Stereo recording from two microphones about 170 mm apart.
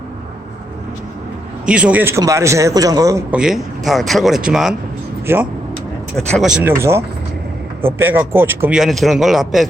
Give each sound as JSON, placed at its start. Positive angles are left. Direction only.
{"t": 1.6, "sound": "a man's voice", "side_deg": -5}
{"t": 3.3, "sound": "speech", "side_deg": -5}
{"t": 5.2, "sound": "speech", "side_deg": -15}
{"t": 6.1, "sound": "a man's voice", "side_deg": 0}